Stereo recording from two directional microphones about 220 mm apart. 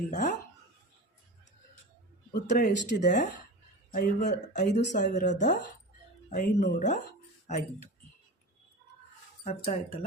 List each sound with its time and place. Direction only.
0.1 s speech: 35° left (ahead or behind)
2.5 s speech: 35° left (ahead or behind)
9.4 s speech: 30° left (ahead or behind)